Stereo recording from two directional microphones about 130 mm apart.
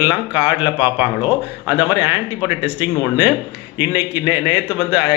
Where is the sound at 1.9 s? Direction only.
15° right (ahead or behind).